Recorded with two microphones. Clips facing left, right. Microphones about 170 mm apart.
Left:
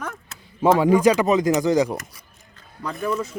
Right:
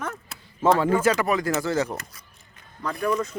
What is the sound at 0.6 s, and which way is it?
Speech, 15° left (ahead or behind).